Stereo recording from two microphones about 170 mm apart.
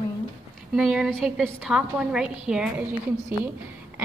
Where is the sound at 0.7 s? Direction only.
5° right (ahead or behind).